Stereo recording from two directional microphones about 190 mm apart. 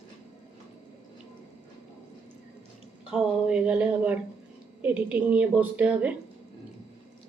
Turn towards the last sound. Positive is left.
turn(degrees=-5)  # may be behind; listen again after turning